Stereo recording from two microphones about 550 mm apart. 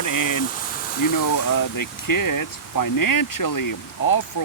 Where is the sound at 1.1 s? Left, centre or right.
Left.